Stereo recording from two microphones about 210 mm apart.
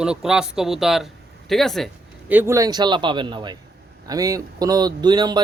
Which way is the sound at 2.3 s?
15° right (ahead or behind).